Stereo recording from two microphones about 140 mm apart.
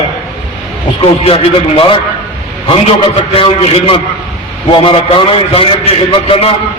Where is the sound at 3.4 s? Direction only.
40° left (ahead or behind).